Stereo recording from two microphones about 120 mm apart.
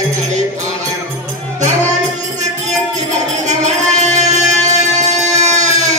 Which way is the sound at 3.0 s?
75° right (ahead or behind).